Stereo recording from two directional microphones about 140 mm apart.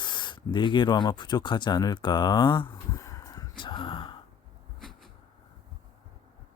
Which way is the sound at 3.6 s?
35° left (ahead or behind).